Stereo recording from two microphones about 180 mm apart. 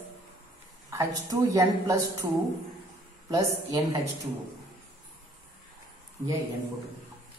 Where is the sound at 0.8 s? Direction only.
20° right (ahead or behind).